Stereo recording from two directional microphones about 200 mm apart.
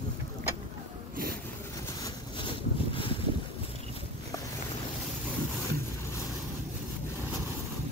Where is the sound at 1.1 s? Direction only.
45° right (ahead or behind).